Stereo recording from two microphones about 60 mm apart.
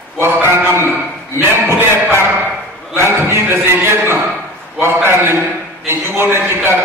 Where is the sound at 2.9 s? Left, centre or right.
Right.